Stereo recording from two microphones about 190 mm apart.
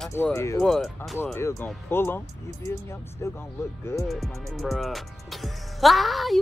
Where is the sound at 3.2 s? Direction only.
15° left (ahead or behind).